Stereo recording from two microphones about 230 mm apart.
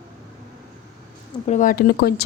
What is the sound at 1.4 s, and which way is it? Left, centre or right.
Speech, left.